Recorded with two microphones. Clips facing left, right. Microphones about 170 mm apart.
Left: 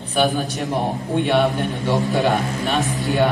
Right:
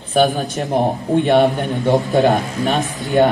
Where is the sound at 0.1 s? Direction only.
40° right (ahead or behind).